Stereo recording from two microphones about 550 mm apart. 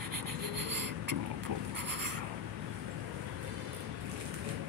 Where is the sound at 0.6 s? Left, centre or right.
Right.